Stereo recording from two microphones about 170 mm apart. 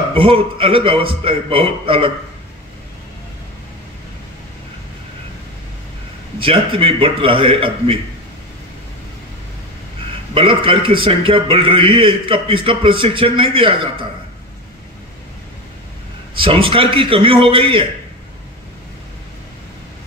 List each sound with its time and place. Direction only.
0.1 s a man's voice: 30° right (ahead or behind)
6.4 s a man's voice: 30° right (ahead or behind)
10.3 s a man's voice: 30° right (ahead or behind)
16.3 s a man's voice: 30° right (ahead or behind)